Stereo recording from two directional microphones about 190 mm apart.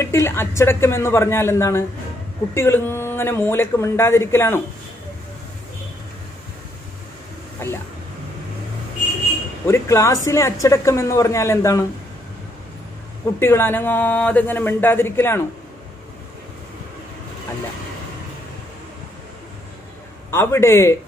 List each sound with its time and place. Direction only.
0.0 s speech: 15° left (ahead or behind)
7.6 s speech: 10° left (ahead or behind)
9.7 s speech: 15° left (ahead or behind)
13.4 s speech: 10° left (ahead or behind)
20.2 s speech: 15° left (ahead or behind)